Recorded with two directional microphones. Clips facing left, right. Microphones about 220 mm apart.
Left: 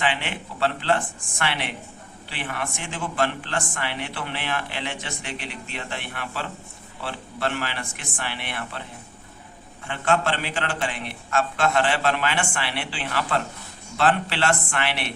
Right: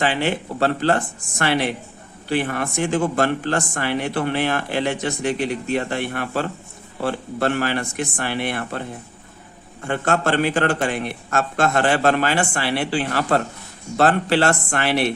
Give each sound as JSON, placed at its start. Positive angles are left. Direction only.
{"t": 0.0, "sound": "speech", "side_deg": -40}
{"t": 9.8, "sound": "speech", "side_deg": -45}